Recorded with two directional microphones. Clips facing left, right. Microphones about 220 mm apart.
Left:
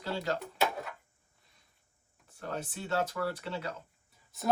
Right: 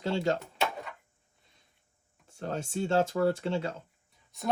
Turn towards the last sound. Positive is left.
turn(degrees=0)  # may be behind; listen again after turning